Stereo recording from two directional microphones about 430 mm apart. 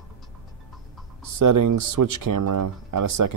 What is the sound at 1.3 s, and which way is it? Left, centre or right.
Speech, right.